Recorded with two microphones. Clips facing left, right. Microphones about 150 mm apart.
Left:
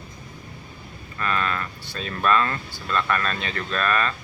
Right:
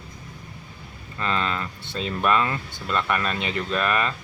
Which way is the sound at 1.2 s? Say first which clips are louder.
Even; 20° right (ahead or behind).